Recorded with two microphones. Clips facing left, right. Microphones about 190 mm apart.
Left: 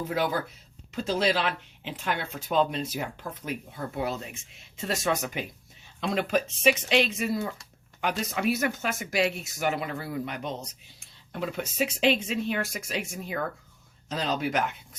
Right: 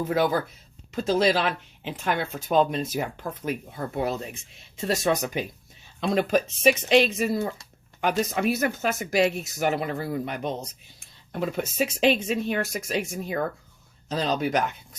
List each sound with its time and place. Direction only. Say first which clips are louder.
0.9 s speech: right 4 dB; 45° right (ahead or behind)